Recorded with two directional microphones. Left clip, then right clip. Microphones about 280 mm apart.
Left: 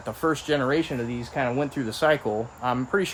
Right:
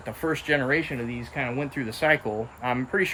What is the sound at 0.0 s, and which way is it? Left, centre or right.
Speech, centre.